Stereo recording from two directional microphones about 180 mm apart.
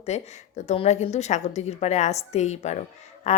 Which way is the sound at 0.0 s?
35° left (ahead or behind).